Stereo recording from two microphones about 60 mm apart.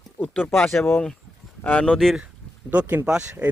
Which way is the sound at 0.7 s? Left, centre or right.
Centre.